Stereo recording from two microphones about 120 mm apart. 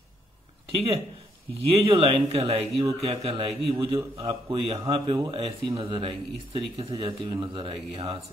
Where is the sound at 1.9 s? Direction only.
50° right (ahead or behind).